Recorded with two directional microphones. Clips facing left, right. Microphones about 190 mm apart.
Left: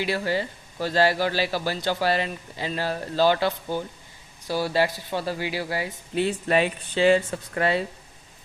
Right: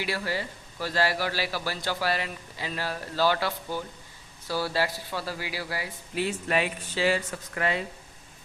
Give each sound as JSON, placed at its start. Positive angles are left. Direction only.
{"t": 0.0, "sound": "a man's voice", "side_deg": 25}